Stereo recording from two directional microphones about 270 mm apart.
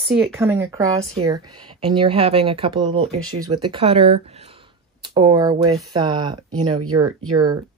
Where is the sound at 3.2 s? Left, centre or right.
Right.